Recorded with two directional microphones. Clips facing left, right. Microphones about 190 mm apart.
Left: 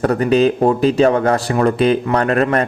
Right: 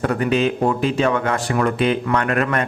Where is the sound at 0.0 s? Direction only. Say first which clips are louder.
Left 5 dB; 40° left (ahead or behind).